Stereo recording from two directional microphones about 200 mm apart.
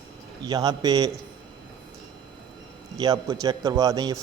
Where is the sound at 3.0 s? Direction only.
15° right (ahead or behind).